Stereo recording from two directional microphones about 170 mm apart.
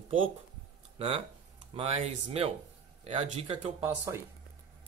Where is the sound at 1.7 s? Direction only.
35° right (ahead or behind).